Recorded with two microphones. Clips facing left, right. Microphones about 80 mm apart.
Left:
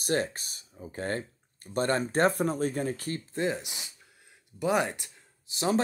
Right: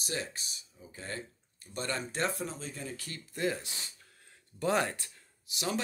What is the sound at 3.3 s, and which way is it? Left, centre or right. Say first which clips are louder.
Speech: left 2 dB; left.